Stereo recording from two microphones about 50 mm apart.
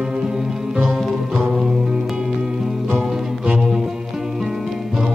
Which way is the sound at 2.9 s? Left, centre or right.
Centre.